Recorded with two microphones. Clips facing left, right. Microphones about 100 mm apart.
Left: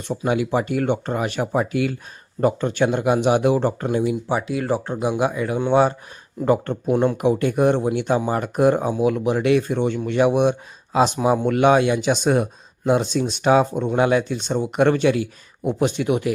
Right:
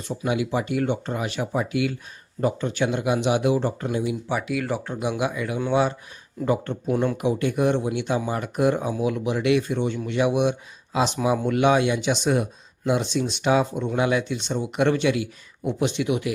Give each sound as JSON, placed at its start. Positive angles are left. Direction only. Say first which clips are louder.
{"t": 0.3, "sound": "speech", "louder": "left 3 dB", "side_deg": 50}
{"t": 4.3, "sound": "speech", "louder": "left 4 dB", "side_deg": 30}
{"t": 6.4, "sound": "speech", "louder": "left 4 dB", "side_deg": 50}